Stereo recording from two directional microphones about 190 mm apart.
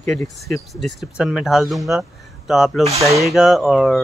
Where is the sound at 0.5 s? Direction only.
Centre (ahead or behind).